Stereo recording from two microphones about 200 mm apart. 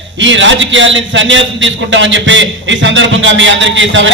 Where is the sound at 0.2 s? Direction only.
65° right (ahead or behind).